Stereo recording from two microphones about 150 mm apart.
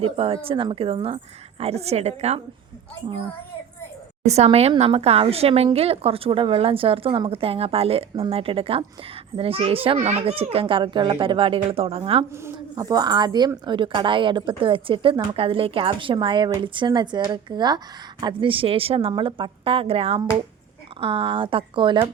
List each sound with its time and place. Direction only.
0.0 s a woman's voice: 40° right (ahead or behind)
4.2 s a woman's voice: 45° right (ahead or behind)
12.3 s a woman's voice: 15° right (ahead or behind)